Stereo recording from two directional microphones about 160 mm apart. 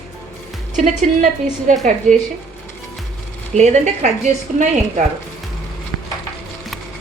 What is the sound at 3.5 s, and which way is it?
A woman's voice, 45° right (ahead or behind).